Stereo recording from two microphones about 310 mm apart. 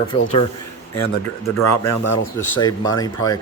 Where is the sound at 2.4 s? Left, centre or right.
Centre.